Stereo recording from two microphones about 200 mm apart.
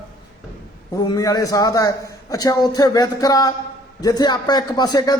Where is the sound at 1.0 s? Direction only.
20° left (ahead or behind).